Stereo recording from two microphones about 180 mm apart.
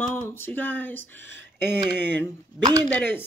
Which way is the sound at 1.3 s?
75° right (ahead or behind).